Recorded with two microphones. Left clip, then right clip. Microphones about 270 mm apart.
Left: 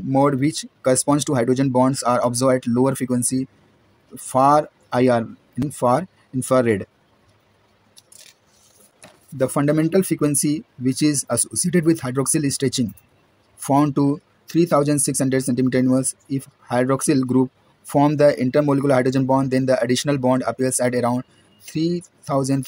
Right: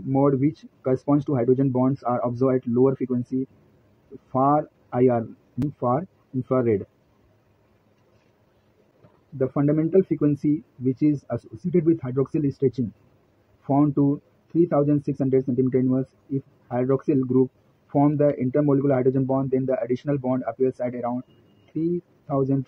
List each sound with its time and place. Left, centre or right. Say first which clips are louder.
0.1 s speech: left 3 dB; left
9.4 s speech: left 4 dB; left